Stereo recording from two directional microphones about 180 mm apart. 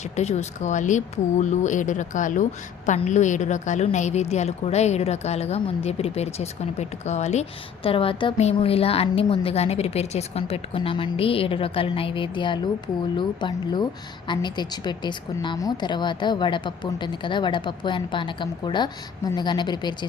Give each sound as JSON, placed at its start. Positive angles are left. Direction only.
{"t": 0.0, "sound": "speech", "side_deg": 40}